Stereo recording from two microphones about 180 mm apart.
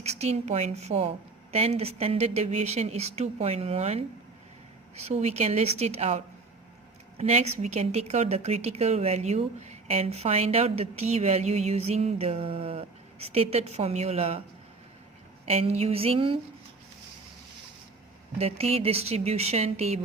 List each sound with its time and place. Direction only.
0.0 s a woman's voice: 35° right (ahead or behind)
15.4 s a woman's voice: 35° right (ahead or behind)
18.3 s a woman's voice: 35° right (ahead or behind)